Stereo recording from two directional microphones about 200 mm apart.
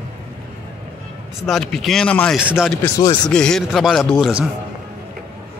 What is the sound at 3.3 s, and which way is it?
A man's voice, 5° left (ahead or behind).